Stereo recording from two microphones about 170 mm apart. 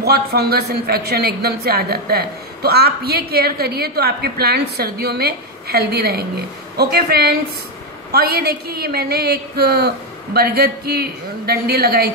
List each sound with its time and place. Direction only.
0.0 s a woman's voice: 70° right (ahead or behind)